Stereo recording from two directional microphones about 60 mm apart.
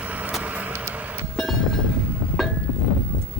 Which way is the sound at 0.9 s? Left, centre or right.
Right.